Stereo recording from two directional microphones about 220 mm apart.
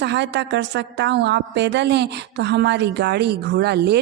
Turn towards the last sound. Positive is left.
turn(degrees=-50)  # may be behind; listen again after turning